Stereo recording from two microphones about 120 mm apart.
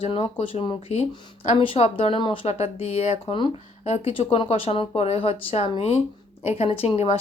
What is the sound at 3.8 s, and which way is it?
Speech, 55° left (ahead or behind).